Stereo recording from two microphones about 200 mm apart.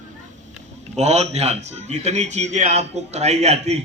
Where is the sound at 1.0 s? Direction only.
35° right (ahead or behind).